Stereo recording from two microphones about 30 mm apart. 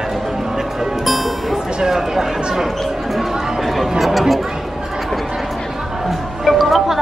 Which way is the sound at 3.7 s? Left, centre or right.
Centre.